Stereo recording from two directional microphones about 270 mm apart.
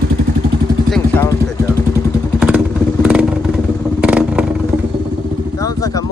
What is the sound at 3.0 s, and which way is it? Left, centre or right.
Vehicle, centre.